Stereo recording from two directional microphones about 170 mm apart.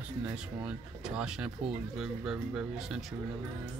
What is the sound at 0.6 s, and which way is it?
Speech, 5° right (ahead or behind).